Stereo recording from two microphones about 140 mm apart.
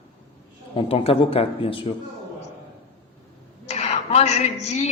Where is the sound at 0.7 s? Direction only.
45° left (ahead or behind).